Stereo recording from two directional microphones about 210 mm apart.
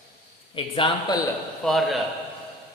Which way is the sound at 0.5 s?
25° left (ahead or behind).